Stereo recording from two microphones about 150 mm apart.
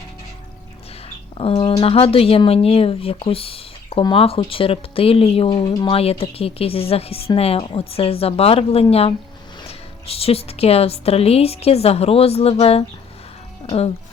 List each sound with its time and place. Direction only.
1.4 s speech: 35° left (ahead or behind)